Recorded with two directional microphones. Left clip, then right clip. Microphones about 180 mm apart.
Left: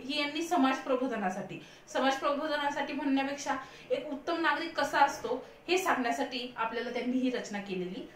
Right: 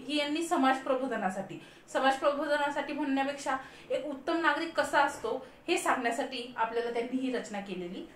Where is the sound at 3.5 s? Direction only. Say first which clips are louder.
Even; 20° right (ahead or behind).